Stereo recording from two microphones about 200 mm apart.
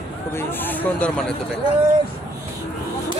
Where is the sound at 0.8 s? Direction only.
5° left (ahead or behind).